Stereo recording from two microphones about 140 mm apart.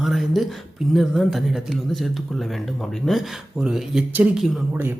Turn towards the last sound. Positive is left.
turn(degrees=-10)  # may be behind; listen again after turning